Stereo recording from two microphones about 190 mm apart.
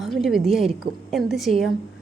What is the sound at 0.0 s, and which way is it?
A woman's voice, centre (ahead or behind).